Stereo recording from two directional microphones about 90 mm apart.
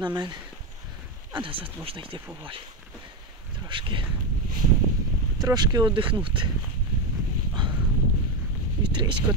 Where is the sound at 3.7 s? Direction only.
65° right (ahead or behind).